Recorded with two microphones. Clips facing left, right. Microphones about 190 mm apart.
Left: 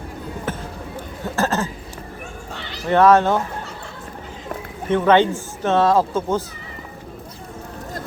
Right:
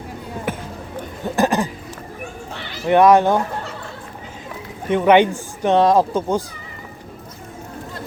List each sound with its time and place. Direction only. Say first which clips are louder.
0.5 s a sound: right 2 dB; 15° right (ahead or behind)
2.8 s speech: right 2 dB; 15° right (ahead or behind)
4.9 s speech: right 2 dB; 15° right (ahead or behind)